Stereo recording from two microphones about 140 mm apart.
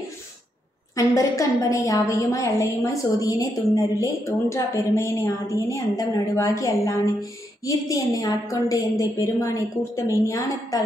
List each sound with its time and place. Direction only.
0.9 s a woman's voice: 25° left (ahead or behind)